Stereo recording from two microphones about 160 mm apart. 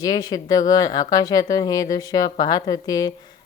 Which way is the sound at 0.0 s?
25° left (ahead or behind).